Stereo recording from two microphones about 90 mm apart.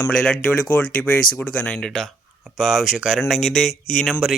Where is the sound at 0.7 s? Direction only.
15° left (ahead or behind).